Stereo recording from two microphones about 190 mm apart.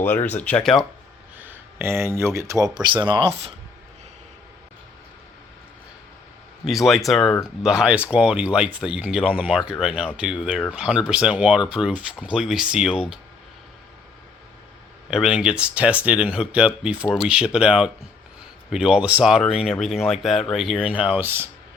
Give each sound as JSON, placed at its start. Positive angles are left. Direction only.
{"t": 0.0, "sound": "speech", "side_deg": 10}
{"t": 1.4, "sound": "speech", "side_deg": -10}
{"t": 6.7, "sound": "speech", "side_deg": 0}
{"t": 15.1, "sound": "speech", "side_deg": -5}